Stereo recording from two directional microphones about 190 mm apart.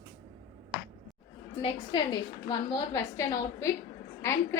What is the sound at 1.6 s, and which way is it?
A woman's voice, 25° left (ahead or behind).